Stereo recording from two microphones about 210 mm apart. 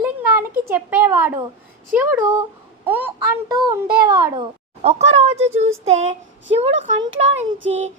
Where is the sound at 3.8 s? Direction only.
45° right (ahead or behind).